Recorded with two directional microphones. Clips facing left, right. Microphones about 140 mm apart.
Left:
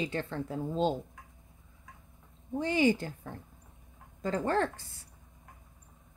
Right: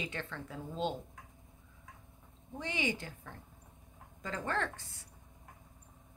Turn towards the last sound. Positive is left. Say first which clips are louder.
# left 7 dB
turn(degrees=35)  # may be behind; listen again after turning